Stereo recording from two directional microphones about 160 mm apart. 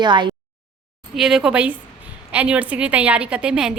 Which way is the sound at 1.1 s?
5° right (ahead or behind).